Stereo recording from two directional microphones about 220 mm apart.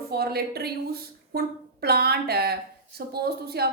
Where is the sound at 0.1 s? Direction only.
45° right (ahead or behind).